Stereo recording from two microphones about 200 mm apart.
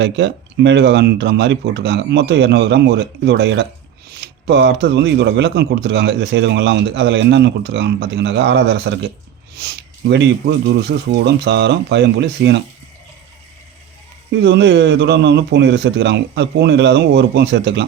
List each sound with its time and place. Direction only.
0.0 s speech: 60° right (ahead or behind)
14.3 s speech: 60° right (ahead or behind)